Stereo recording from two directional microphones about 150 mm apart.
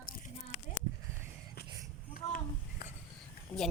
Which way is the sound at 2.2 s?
90° left.